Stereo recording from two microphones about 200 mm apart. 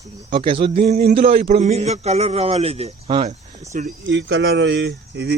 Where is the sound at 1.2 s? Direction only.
45° right (ahead or behind).